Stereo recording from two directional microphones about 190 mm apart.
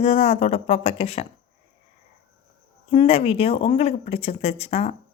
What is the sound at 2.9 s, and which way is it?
Speech, 30° left (ahead or behind).